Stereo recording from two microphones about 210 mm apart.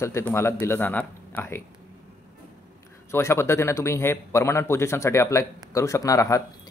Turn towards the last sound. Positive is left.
turn(degrees=15)  # may be behind; listen again after turning